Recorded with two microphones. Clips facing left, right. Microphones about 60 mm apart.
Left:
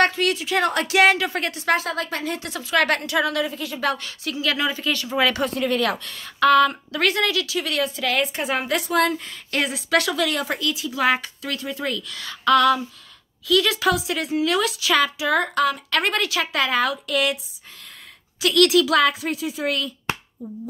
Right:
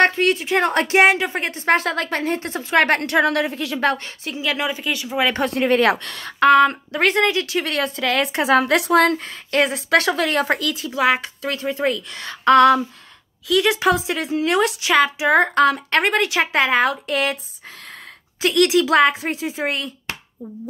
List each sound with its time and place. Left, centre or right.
0.0 s a woman's voice: right
1.0 s a woman's voice: right
1.7 s a woman's voice: right
3.8 s a woman's voice: right
4.4 s speech: centre
5.3 s a woman's voice: right
6.4 s a woman's voice: right
7.5 s a woman's voice: right
11.4 s a woman's voice: right
13.5 s a woman's voice: right
18.4 s a woman's voice: right